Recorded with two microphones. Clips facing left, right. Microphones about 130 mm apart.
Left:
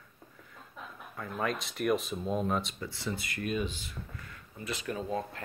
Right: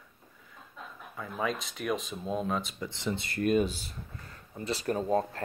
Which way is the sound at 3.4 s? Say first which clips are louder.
Right 8 dB; 40° right (ahead or behind).